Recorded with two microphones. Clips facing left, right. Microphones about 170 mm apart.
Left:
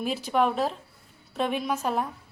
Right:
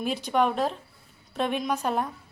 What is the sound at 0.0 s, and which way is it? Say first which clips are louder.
A woman's voice: even; 5° left (ahead or behind).